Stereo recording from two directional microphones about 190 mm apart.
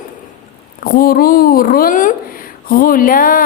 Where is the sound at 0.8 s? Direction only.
50° left (ahead or behind).